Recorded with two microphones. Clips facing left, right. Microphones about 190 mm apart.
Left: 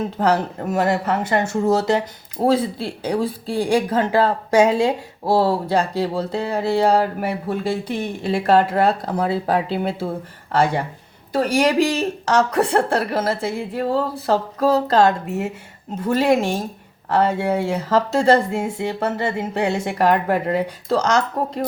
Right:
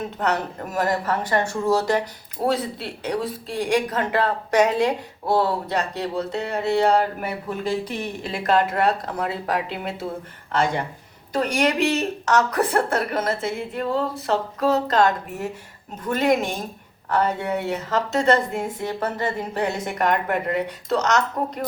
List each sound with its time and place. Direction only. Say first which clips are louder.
0.2 s speech: left 5 dB; 30° left (ahead or behind)
11.3 s speech: left 4 dB; 30° left (ahead or behind)